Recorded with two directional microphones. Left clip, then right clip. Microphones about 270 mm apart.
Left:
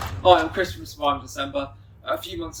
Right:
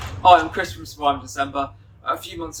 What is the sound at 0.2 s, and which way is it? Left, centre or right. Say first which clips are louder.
Speech: right 3 dB; centre.